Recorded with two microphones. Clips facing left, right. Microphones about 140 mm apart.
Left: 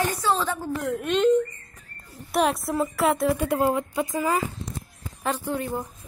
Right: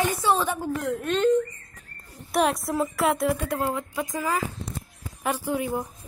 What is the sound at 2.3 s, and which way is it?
A woman's voice, centre (ahead or behind).